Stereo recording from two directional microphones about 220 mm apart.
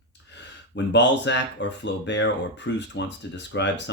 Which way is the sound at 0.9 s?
55° left (ahead or behind).